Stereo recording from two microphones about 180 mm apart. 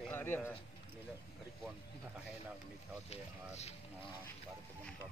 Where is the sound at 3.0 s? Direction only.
35° left (ahead or behind).